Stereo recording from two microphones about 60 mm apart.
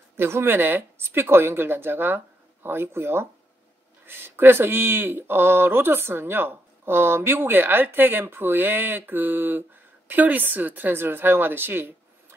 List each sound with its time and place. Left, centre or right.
0.2 s speech: right